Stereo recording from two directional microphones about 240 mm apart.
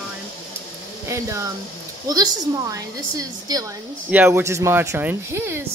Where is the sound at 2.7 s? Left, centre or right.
Centre.